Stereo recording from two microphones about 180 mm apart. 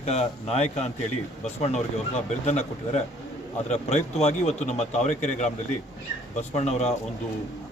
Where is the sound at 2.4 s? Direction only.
40° left (ahead or behind).